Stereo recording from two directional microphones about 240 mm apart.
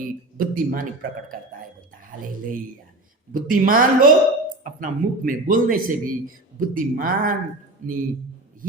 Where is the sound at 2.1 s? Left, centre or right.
Right.